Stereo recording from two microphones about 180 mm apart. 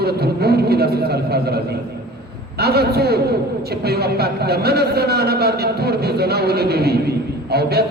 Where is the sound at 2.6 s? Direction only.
60° right (ahead or behind).